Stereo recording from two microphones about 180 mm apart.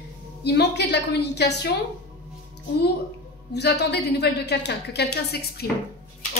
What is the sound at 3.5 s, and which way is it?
A woman's voice, 70° left (ahead or behind).